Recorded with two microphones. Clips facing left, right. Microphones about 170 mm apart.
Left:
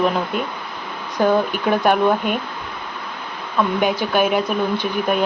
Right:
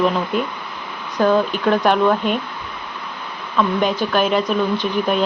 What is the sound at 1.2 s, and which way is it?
Speech, 15° left (ahead or behind).